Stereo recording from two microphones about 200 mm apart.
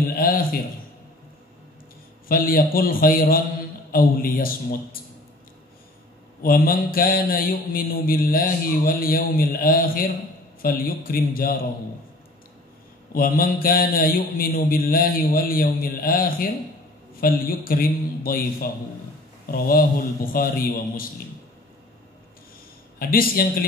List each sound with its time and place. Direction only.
0.1 s a sound: 45° left (ahead or behind)
2.2 s mantra: 45° left (ahead or behind)
6.4 s mantra: 45° left (ahead or behind)
13.1 s mantra: 45° left (ahead or behind)
22.9 s mantra: 45° left (ahead or behind)